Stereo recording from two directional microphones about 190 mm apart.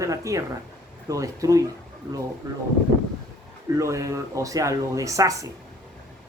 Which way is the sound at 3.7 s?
15° right (ahead or behind).